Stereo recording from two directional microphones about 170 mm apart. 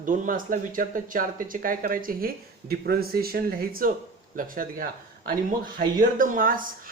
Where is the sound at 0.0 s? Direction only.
55° right (ahead or behind).